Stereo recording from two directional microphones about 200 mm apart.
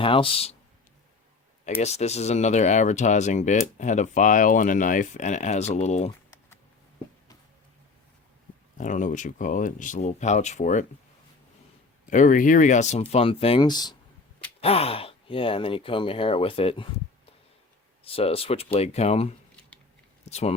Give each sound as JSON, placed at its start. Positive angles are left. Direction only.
{"t": 0.0, "sound": "speech", "side_deg": 25}
{"t": 1.8, "sound": "speech", "side_deg": 35}
{"t": 8.8, "sound": "speech", "side_deg": 40}
{"t": 12.1, "sound": "speech", "side_deg": 40}
{"t": 18.0, "sound": "speech", "side_deg": 30}